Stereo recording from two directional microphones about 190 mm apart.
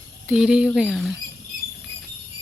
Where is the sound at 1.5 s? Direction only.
50° right (ahead or behind).